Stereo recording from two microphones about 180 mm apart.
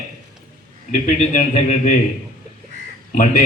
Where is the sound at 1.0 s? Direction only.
45° left (ahead or behind).